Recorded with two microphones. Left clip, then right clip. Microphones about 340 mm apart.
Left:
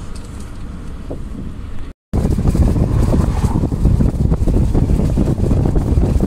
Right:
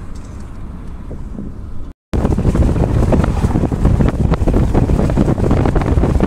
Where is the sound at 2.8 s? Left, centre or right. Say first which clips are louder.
Right 4 dB; right.